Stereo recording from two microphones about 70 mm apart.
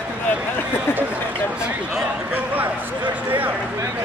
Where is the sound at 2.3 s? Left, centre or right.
Right.